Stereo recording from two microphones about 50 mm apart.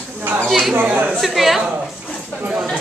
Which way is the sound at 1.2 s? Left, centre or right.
Centre.